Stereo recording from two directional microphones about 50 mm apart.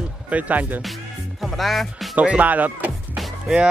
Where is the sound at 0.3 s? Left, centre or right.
Right.